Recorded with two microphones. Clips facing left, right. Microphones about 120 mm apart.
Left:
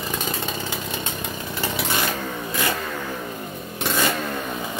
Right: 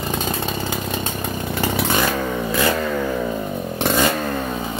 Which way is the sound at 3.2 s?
70° right (ahead or behind).